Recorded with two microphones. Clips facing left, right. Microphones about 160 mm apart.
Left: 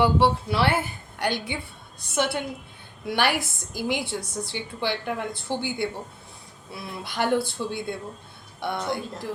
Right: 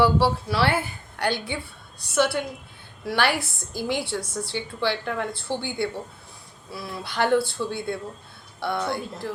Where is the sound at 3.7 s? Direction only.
50° left (ahead or behind).